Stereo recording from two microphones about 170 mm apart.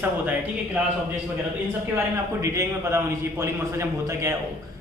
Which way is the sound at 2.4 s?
15° right (ahead or behind).